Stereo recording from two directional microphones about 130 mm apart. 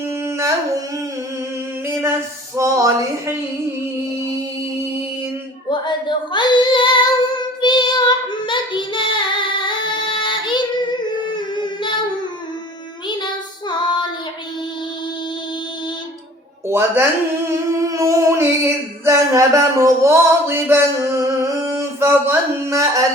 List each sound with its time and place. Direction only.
0.0 s humming: 20° right (ahead or behind)
1.9 s a sound: 20° right (ahead or behind)
5.6 s female singing: 35° left (ahead or behind)
11.3 s child singing: 35° left (ahead or behind)
13.1 s child singing: 35° left (ahead or behind)
16.6 s music: 20° right (ahead or behind)
17.5 s singing: 25° right (ahead or behind)
19.0 s a sound: 25° right (ahead or behind)